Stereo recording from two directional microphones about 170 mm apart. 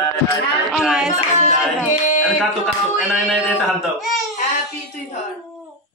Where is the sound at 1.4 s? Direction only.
45° left (ahead or behind).